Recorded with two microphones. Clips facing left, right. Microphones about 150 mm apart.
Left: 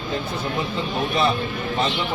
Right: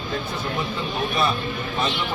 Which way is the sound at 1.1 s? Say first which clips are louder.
Left 3 dB; 25° left (ahead or behind).